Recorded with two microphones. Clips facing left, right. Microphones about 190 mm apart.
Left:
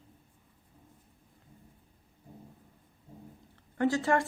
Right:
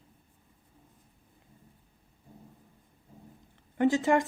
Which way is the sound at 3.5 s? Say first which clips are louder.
Right 3 dB; 20° right (ahead or behind).